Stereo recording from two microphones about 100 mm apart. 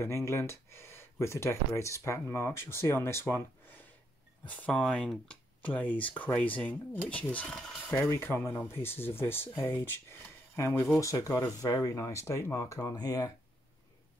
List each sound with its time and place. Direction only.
0.0 s speech: 25° left (ahead or behind); by 8.1 s 5° left (ahead or behind)
8.2 s speech: 20° left (ahead or behind)
12.9 s speech: 40° left (ahead or behind)